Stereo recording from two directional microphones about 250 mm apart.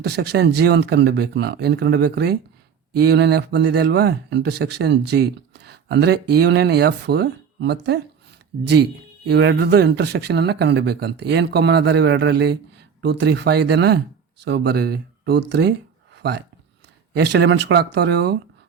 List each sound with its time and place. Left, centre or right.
0.0 s speech: right
16.1 s a sound: right
17.2 s speech: right